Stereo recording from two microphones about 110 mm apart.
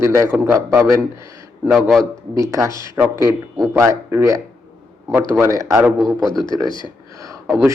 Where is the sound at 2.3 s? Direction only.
30° right (ahead or behind).